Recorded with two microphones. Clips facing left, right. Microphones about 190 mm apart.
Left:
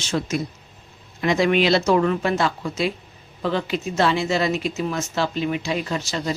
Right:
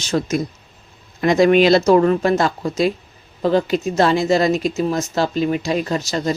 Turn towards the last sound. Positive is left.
turn(degrees=-40)  # may be behind; listen again after turning